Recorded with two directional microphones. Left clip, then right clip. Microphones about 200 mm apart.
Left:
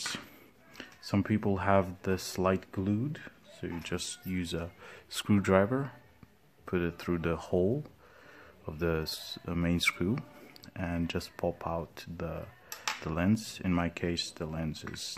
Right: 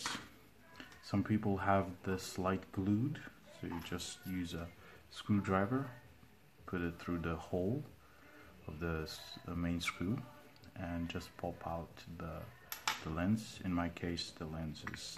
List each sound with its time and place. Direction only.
0.7 s speech: 50° left (ahead or behind)
8.6 s speech: 55° left (ahead or behind)